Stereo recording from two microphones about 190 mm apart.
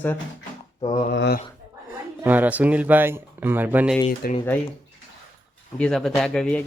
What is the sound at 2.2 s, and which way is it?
Speech, 10° right (ahead or behind).